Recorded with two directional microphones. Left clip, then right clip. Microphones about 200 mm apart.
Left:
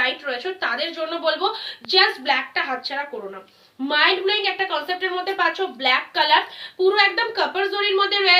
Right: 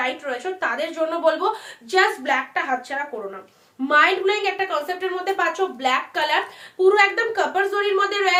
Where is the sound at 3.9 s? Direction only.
35° right (ahead or behind).